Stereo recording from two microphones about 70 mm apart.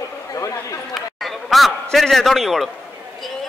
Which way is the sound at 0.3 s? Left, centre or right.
Left.